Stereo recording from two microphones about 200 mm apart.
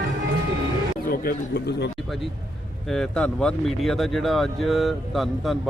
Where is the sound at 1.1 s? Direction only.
45° left (ahead or behind).